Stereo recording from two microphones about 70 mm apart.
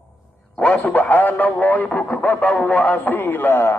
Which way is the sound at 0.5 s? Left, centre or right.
Centre.